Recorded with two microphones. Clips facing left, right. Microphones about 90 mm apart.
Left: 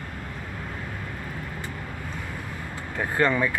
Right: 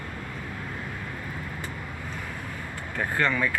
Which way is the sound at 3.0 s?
20° left (ahead or behind).